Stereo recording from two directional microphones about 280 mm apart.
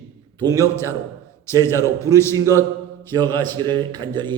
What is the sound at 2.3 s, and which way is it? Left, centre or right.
A man's voice, centre.